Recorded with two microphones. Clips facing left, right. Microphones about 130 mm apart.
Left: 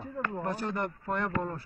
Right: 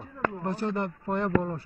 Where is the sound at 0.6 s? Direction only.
30° right (ahead or behind).